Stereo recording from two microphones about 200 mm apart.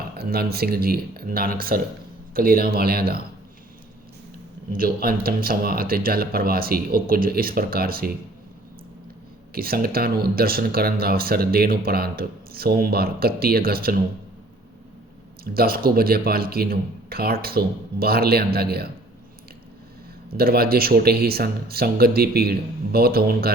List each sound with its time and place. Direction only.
0.2 s speech: 50° right (ahead or behind)
4.7 s speech: 45° right (ahead or behind)
9.6 s speech: 50° right (ahead or behind)
15.4 s speech: 50° right (ahead or behind)
20.3 s speech: 50° right (ahead or behind)